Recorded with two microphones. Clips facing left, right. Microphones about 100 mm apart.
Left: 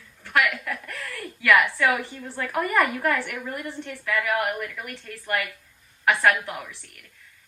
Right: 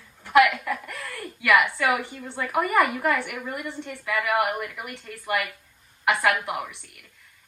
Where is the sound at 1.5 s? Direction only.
10° right (ahead or behind).